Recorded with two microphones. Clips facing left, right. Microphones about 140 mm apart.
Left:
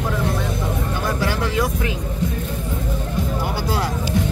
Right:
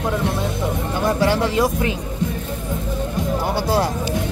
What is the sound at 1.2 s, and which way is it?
Vehicle, 25° right (ahead or behind).